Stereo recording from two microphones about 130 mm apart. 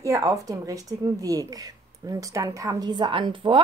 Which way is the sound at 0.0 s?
25° right (ahead or behind).